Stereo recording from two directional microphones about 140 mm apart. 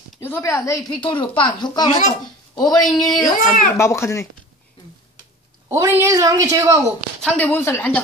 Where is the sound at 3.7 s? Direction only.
20° left (ahead or behind).